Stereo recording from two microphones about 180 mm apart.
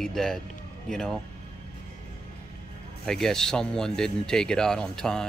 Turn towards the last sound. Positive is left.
turn(degrees=5)  # may be behind; listen again after turning